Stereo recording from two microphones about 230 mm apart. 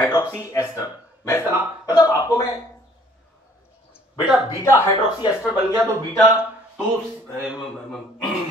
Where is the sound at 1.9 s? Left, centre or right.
Centre.